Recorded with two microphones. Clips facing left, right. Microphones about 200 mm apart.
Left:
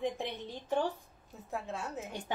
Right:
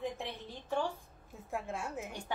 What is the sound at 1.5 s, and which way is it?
Speech, 10° right (ahead or behind).